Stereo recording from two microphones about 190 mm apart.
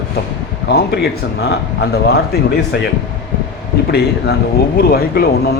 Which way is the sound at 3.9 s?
60° left (ahead or behind).